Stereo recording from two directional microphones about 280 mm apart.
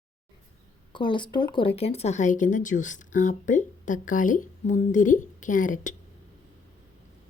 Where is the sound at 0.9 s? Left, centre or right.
Centre.